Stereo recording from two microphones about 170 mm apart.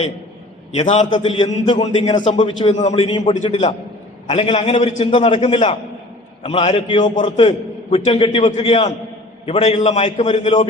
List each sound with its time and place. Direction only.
0.8 s a man's voice: 45° left (ahead or behind)
1.4 s a man's voice: 25° left (ahead or behind)
1.8 s a man's voice: 40° left (ahead or behind)